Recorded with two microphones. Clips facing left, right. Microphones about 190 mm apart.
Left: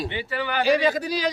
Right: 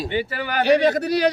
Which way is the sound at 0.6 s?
65° right (ahead or behind).